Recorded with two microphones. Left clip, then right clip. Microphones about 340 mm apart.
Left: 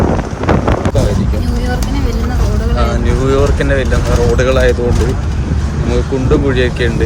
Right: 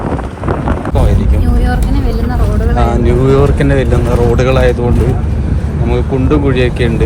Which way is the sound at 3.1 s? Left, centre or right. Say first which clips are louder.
Right 3 dB; centre.